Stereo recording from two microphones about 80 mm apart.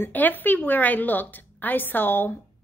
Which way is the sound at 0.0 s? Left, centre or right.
Left.